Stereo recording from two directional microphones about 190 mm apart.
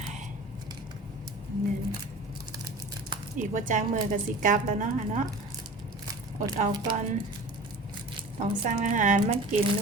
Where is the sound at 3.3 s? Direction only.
40° right (ahead or behind).